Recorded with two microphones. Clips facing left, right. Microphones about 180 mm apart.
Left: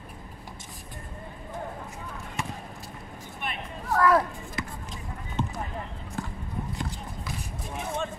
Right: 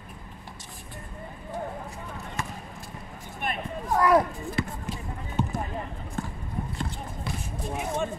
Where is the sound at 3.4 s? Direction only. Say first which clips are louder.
Right 4 dB; 45° right (ahead or behind).